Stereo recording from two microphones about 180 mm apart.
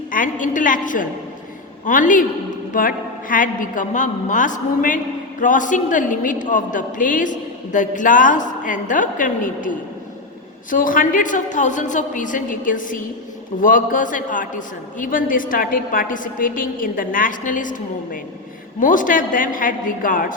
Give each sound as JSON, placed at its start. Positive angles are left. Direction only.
{"t": 0.1, "sound": "a woman's voice", "side_deg": 45}